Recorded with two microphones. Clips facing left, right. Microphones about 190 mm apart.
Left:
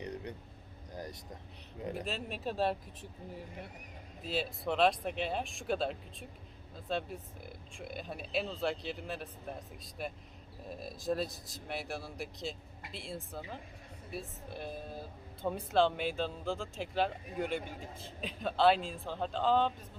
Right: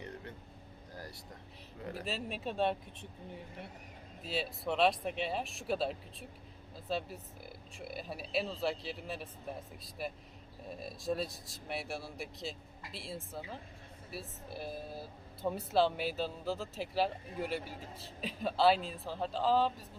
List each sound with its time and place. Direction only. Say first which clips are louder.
0.0 s a sound: left 5 dB; 20° left (ahead or behind)
0.9 s speech: left 5 dB; 20° left (ahead or behind)
2.0 s speech: left 1 dB; centre (ahead or behind)